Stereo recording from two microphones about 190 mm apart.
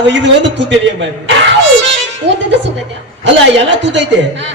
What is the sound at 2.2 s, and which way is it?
A woman's voice, 70° right (ahead or behind).